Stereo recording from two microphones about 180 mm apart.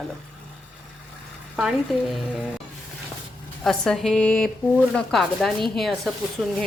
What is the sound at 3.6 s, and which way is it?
Speech, centre (ahead or behind).